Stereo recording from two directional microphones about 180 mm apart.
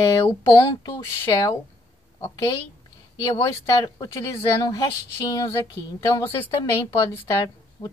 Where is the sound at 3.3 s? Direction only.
20° left (ahead or behind).